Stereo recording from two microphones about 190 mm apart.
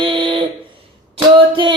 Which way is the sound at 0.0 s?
25° right (ahead or behind).